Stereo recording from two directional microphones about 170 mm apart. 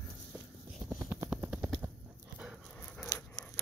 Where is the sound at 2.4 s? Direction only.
Centre (ahead or behind).